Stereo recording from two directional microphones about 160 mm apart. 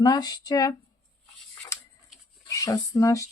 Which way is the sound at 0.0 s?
25° left (ahead or behind).